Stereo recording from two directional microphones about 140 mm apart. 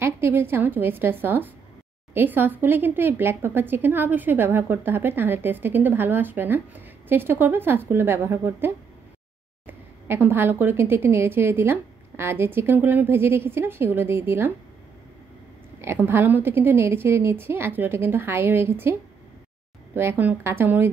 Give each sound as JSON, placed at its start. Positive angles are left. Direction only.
{"t": 0.0, "sound": "speech", "side_deg": -15}
{"t": 15.8, "sound": "speech", "side_deg": -15}
{"t": 20.0, "sound": "speech", "side_deg": -15}